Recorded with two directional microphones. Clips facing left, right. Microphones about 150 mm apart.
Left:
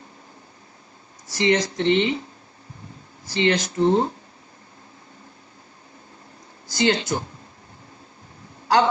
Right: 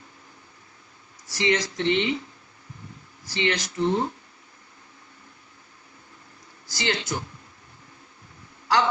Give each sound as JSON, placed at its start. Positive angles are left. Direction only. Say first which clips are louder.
{"t": 1.3, "sound": "speech", "louder": "left 4 dB", "side_deg": 25}
{"t": 3.2, "sound": "speech", "louder": "left 5 dB", "side_deg": 25}
{"t": 6.7, "sound": "speech", "louder": "left 7 dB", "side_deg": 25}
{"t": 8.6, "sound": "a sound", "louder": "left 4 dB", "side_deg": 30}